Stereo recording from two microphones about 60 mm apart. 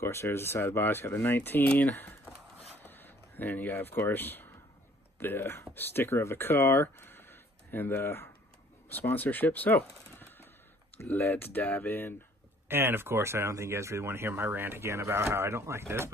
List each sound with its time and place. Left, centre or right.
0.0 s speech: left
2.8 s a sound: left
4.1 s speech: left
9.1 s speech: left
12.6 s speech: right